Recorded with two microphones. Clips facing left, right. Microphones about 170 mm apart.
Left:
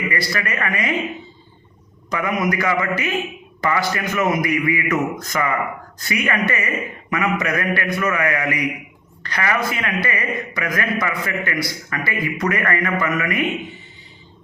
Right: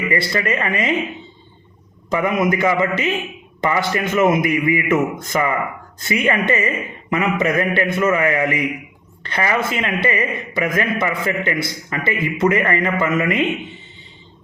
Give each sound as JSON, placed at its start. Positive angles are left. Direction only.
{"t": 0.1, "sound": "a man's voice", "side_deg": -25}
{"t": 2.0, "sound": "a man's voice", "side_deg": -25}